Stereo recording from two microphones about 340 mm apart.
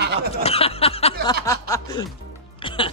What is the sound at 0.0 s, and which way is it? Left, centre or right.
Snicker, right.